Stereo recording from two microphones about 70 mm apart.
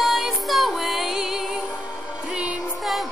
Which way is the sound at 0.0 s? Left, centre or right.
Centre.